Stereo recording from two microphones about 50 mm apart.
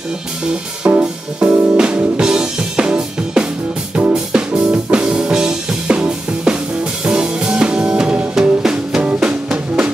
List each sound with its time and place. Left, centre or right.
0.9 s music: right
9.0 s drum: right